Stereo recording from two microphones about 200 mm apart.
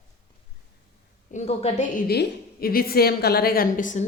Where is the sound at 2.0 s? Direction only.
50° left (ahead or behind).